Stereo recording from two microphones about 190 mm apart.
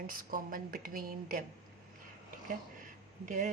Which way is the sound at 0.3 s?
45° right (ahead or behind).